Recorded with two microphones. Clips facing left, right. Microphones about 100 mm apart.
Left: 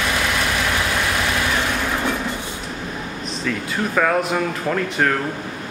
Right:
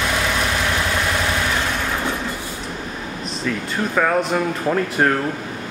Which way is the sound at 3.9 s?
Centre (ahead or behind).